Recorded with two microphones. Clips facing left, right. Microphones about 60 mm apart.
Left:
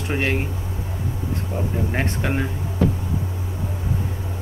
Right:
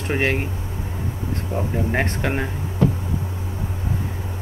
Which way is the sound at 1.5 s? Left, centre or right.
Centre.